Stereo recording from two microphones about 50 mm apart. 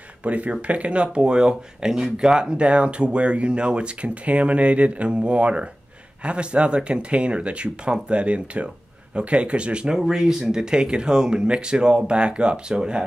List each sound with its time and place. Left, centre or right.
0.2 s speech: right